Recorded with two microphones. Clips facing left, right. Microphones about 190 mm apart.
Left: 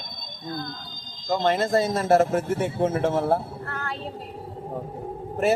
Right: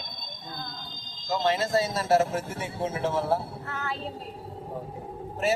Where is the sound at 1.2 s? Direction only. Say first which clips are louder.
Left 4 dB; 55° left (ahead or behind).